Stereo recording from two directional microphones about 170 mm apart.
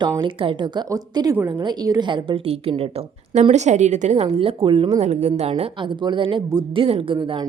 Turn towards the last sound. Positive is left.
turn(degrees=-25)  # may be behind; listen again after turning